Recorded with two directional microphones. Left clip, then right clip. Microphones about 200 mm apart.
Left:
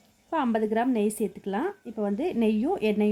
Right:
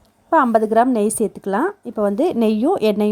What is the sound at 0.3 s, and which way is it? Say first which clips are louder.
A woman's voice: right 12 dB; 30° right (ahead or behind).